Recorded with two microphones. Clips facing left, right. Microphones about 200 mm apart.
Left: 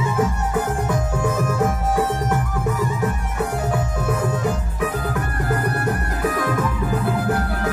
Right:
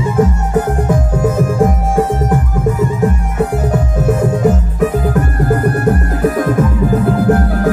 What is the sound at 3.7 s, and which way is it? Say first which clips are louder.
Music: right 8 dB; 45° right (ahead or behind).